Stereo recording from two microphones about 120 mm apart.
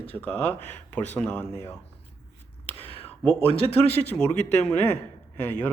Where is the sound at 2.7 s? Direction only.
55° left (ahead or behind).